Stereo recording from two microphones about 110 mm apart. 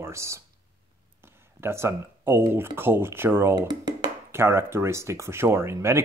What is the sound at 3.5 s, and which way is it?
Speech, 40° right (ahead or behind).